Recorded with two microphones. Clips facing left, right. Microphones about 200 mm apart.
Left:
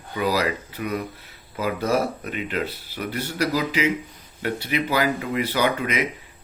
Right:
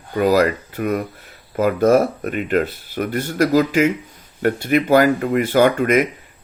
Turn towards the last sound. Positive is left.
turn(degrees=-50)  # may be behind; listen again after turning